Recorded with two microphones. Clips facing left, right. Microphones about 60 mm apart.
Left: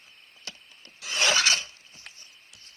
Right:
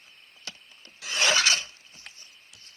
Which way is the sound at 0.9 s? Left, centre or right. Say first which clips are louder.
Even; right.